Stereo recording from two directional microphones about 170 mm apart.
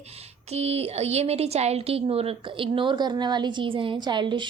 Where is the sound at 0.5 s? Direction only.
35° right (ahead or behind).